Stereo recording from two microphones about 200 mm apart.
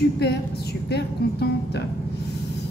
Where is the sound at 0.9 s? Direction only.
55° left (ahead or behind).